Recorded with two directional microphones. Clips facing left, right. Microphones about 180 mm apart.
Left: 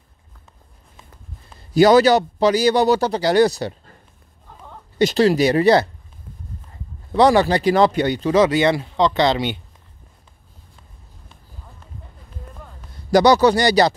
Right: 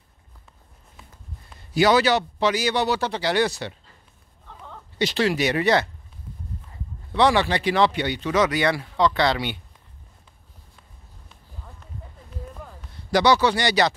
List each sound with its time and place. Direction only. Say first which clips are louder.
1.5 s speech: left 6 dB; 40° left (ahead or behind)
4.9 s speech: left 7 dB; 40° left (ahead or behind)
7.1 s speech: left 5 dB; 40° left (ahead or behind); by 9.6 s 20° left (ahead or behind)
12.9 s speech: left 5 dB; 40° left (ahead or behind)